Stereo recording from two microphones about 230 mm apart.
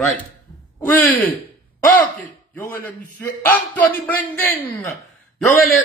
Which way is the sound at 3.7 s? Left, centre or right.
Centre.